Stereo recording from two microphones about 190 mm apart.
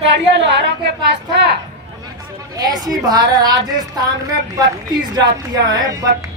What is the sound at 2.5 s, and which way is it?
A woman's voice, 20° right (ahead or behind).